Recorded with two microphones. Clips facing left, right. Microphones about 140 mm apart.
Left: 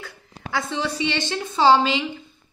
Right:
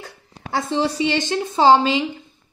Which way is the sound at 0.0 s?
40° right (ahead or behind).